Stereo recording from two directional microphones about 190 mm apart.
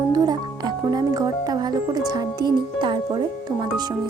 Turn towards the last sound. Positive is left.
turn(degrees=-20)  # may be behind; listen again after turning